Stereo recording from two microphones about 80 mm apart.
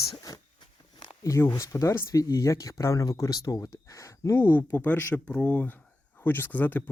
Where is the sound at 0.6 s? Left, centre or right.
Left.